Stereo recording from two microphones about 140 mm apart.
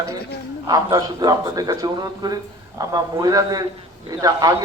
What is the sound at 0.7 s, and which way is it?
A man's voice, 25° right (ahead or behind).